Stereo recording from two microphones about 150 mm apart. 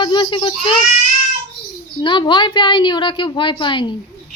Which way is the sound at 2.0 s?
30° left (ahead or behind).